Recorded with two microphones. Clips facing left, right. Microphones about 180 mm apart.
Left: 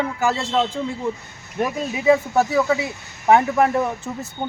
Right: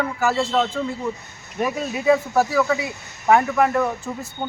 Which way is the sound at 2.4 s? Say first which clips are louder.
Left 1 dB; 20° left (ahead or behind).